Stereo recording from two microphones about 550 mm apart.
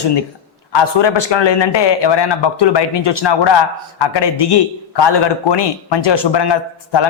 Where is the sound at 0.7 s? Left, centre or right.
Left.